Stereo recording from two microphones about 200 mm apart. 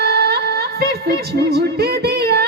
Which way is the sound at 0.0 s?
55° right (ahead or behind).